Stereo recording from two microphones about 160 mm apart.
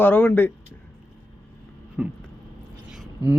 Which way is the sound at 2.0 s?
5° right (ahead or behind).